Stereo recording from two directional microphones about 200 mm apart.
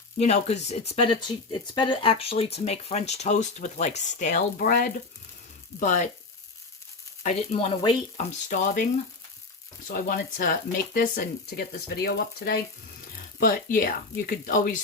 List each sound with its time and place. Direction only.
0.2 s speech: 35° left (ahead or behind)
7.2 s speech: 35° left (ahead or behind)
8.2 s speech: 40° left (ahead or behind)